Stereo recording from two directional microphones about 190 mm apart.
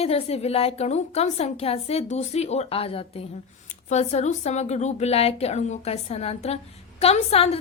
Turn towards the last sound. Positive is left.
turn(degrees=35)  # may be behind; listen again after turning